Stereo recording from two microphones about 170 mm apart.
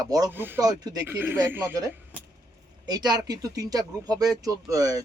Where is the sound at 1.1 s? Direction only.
10° right (ahead or behind).